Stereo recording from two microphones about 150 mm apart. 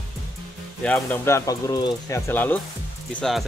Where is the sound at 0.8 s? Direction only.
10° left (ahead or behind).